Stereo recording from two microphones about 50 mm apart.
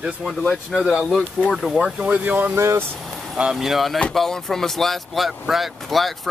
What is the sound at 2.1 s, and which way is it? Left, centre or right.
Speech, right.